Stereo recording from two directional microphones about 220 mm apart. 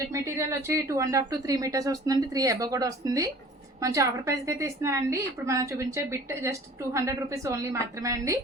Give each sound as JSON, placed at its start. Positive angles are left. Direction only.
{"t": 0.1, "sound": "a woman's voice", "side_deg": -15}